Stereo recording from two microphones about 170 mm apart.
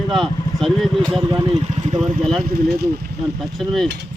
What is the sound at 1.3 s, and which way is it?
Speech, 25° right (ahead or behind).